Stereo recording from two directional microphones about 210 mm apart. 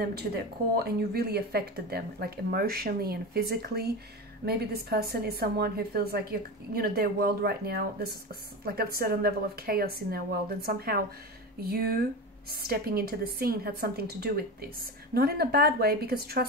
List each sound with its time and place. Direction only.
0.0 s a woman's voice: 50° right (ahead or behind)
12.4 s a woman's voice: 45° right (ahead or behind)